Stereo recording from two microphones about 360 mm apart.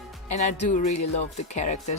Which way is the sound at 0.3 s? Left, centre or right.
Centre.